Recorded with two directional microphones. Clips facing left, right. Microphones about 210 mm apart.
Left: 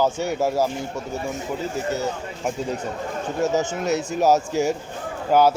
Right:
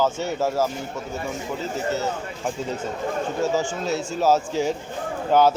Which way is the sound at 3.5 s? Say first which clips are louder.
Left 2 dB; 20° left (ahead or behind).